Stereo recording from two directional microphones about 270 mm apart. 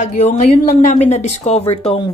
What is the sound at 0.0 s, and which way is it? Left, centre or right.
Speech, left.